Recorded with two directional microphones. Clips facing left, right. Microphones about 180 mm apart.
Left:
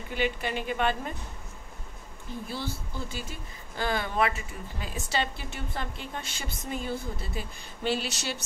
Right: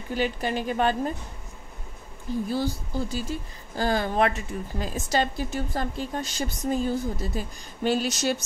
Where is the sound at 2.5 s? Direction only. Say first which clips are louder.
Right 6 dB; 40° right (ahead or behind).